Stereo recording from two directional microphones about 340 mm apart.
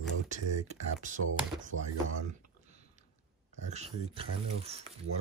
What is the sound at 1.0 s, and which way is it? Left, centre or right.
Speech, right.